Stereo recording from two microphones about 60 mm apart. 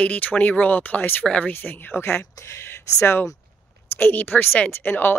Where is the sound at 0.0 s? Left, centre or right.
Left.